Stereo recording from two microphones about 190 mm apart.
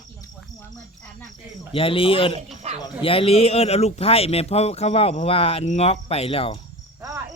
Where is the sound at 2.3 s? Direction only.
35° right (ahead or behind).